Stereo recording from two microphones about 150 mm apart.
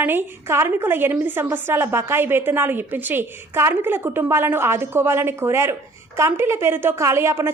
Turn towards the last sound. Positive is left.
turn(degrees=-15)  # may be behind; listen again after turning